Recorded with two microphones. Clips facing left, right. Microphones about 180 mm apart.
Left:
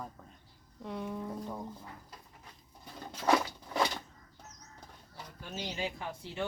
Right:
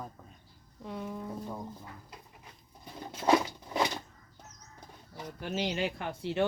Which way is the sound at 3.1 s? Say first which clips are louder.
Right 3 dB; 20° right (ahead or behind).